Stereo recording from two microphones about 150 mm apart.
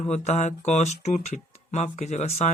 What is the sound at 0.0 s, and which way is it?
Speech, 50° left (ahead or behind).